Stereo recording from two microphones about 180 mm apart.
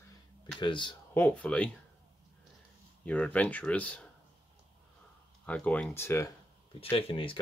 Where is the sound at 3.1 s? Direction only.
5° left (ahead or behind).